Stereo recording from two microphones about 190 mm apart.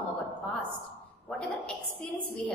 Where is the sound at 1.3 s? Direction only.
5° left (ahead or behind).